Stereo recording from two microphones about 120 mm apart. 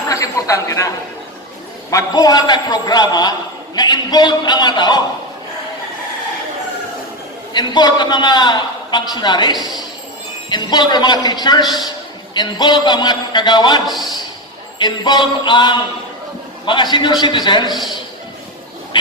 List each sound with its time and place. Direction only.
0.1 s a sound: 25° left (ahead or behind)
1.9 s a man's voice: 30° left (ahead or behind)
7.5 s a man's voice: 35° left (ahead or behind)